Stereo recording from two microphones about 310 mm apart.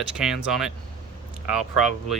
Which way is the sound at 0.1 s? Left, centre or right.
Centre.